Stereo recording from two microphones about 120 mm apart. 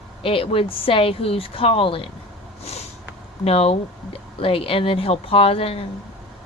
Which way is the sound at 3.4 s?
55° left (ahead or behind).